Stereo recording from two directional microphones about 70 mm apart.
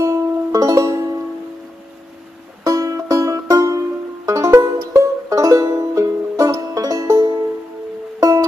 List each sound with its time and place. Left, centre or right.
0.0 s music: right
2.6 s music: right